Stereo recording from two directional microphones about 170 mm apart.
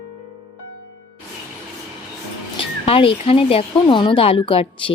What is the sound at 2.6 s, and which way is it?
Speech, 30° left (ahead or behind).